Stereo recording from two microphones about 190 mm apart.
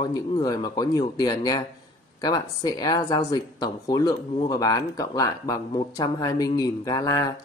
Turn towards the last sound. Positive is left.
turn(degrees=20)  # may be behind; listen again after turning